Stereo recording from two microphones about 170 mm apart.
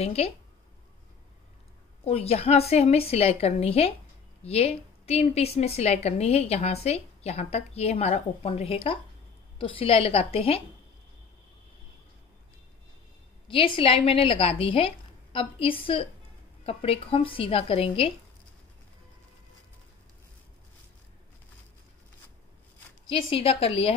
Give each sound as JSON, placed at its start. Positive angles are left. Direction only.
{"t": 0.0, "sound": "a woman's voice", "side_deg": 35}
{"t": 2.0, "sound": "a woman's voice", "side_deg": 35}
{"t": 13.5, "sound": "a woman's voice", "side_deg": 30}
{"t": 23.0, "sound": "a woman's voice", "side_deg": 35}